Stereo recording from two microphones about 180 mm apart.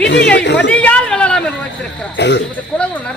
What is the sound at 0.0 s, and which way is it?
Speech, 75° left (ahead or behind).